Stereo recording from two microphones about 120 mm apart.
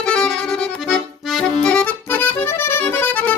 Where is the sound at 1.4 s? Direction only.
5° left (ahead or behind).